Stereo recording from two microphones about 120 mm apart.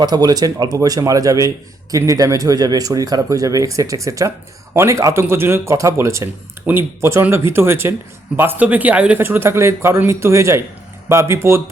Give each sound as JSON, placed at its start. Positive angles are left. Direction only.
{"t": 0.0, "sound": "speech", "side_deg": -35}